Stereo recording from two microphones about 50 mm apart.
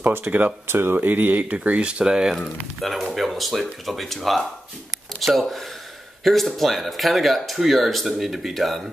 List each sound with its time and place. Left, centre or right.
0.0 s speech: right
0.7 s speech: right
0.9 s speech: right; by 2.3 s centre
2.8 s speech: centre